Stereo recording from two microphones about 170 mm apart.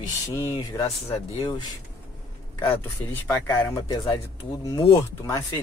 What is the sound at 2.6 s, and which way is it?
Speech, 15° left (ahead or behind).